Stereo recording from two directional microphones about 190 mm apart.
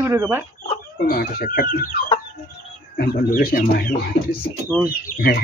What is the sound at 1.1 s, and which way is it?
Speech, 50° left (ahead or behind).